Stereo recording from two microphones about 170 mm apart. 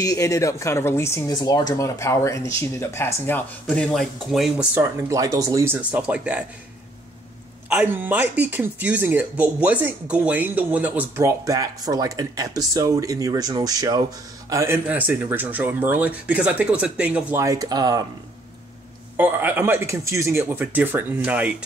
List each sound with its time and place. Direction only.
0.0 s speech: 20° left (ahead or behind); by 4.6 s centre (ahead or behind)
4.7 s speech: 20° right (ahead or behind)
7.7 s speech: 10° right (ahead or behind)
19.1 s speech: 10° right (ahead or behind)